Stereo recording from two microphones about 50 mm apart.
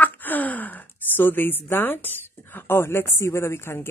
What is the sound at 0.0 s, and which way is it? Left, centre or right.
A woman's voice, left.